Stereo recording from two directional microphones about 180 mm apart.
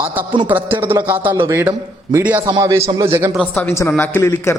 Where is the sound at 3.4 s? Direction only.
10° left (ahead or behind).